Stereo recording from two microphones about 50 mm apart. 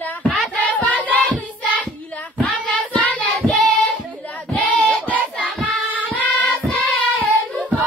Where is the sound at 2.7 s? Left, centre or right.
Left.